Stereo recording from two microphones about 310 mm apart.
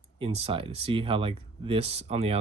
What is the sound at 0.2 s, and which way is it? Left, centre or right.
Speech, centre.